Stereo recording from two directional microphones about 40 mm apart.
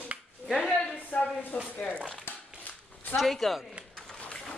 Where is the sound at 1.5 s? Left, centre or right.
Left.